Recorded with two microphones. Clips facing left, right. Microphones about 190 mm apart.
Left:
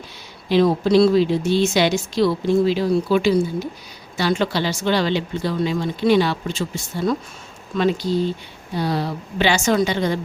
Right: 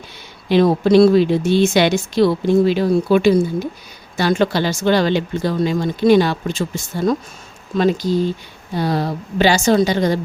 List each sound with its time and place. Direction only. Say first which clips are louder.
0.4 s a woman's voice: right 3 dB; 55° right (ahead or behind); by 10.2 s 40° right (ahead or behind)